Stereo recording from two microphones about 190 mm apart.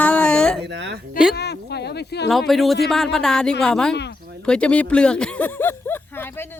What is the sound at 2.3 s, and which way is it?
A man's voice, centre (ahead or behind).